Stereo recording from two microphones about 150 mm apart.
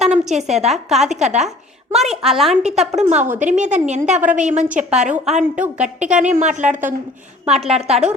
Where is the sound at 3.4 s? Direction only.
50° right (ahead or behind).